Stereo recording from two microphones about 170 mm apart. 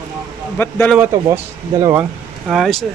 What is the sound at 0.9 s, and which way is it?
Speech, 15° right (ahead or behind).